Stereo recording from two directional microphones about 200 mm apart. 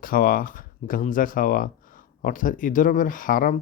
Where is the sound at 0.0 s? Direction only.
45° left (ahead or behind).